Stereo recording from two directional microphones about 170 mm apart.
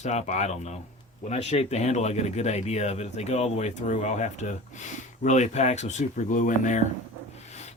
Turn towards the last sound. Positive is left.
turn(degrees=40)  # may be behind; listen again after turning